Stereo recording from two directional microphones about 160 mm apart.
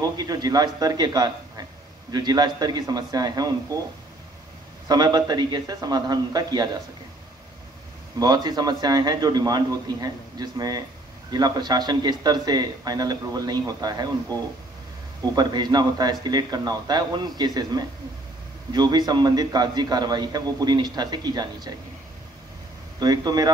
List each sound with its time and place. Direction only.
0.2 s a man's voice: 25° right (ahead or behind)
4.8 s a man's voice: 25° right (ahead or behind)
8.2 s a man's voice: 25° right (ahead or behind)
22.9 s a man's voice: 25° right (ahead or behind)